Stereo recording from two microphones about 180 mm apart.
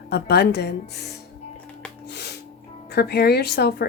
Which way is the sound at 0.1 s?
65° left (ahead or behind).